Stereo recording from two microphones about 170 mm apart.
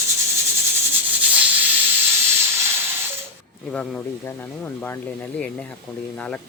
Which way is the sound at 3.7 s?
5° left (ahead or behind).